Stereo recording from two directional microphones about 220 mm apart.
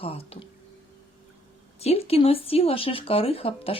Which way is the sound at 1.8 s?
25° left (ahead or behind).